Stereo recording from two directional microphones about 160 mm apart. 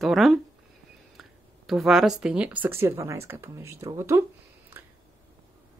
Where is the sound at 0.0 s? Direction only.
Centre (ahead or behind).